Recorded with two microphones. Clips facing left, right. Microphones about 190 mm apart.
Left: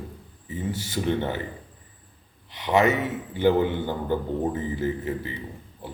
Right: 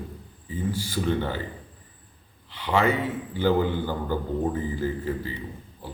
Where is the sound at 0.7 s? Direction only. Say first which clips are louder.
Left 1 dB; 20° left (ahead or behind).